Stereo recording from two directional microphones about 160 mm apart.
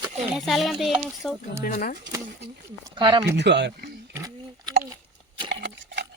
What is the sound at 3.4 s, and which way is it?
Speech, 90° right.